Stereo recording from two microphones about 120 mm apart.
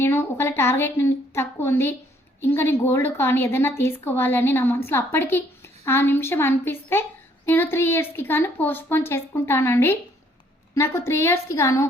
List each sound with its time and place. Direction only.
0.0 s a woman's voice: 20° left (ahead or behind)